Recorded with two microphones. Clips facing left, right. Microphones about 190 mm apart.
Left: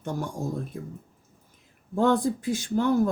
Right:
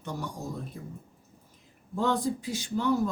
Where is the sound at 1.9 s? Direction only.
55° left (ahead or behind).